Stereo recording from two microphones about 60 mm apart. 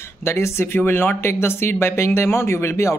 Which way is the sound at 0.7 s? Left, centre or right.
Left.